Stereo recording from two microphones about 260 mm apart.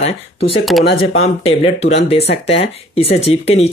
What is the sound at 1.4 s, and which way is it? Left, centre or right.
Speech, left.